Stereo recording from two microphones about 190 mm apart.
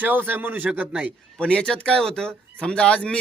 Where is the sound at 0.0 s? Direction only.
10° right (ahead or behind).